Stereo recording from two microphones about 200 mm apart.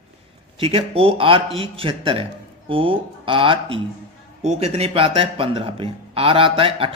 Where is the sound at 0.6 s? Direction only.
30° right (ahead or behind).